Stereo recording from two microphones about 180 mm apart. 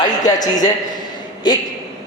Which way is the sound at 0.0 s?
20° left (ahead or behind).